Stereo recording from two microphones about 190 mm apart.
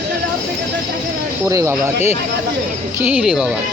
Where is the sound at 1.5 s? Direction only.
15° right (ahead or behind).